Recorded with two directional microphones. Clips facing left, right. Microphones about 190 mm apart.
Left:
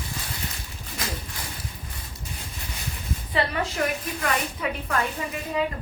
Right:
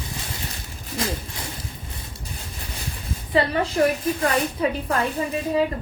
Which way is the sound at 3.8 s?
35° right (ahead or behind).